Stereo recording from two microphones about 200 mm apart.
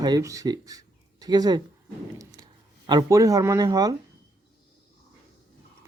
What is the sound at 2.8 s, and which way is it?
Speech, 20° right (ahead or behind).